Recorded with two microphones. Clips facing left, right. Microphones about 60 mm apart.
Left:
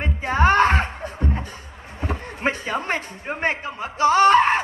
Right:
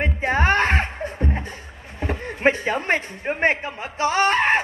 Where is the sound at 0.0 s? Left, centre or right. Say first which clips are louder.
Left 1 dB; right.